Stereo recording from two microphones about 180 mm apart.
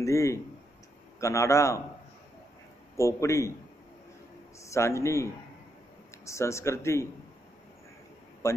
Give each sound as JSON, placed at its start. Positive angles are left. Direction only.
{"t": 0.0, "sound": "speech", "side_deg": 15}
{"t": 3.0, "sound": "speech", "side_deg": 15}
{"t": 4.6, "sound": "speech", "side_deg": 15}